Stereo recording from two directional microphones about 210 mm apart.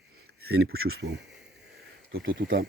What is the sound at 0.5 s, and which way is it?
Speech, 85° right.